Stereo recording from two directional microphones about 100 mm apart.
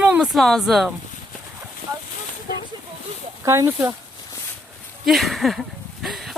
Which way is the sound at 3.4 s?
30° right (ahead or behind).